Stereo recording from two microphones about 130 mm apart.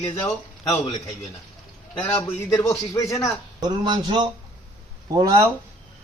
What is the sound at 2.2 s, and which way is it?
Speech, 20° left (ahead or behind).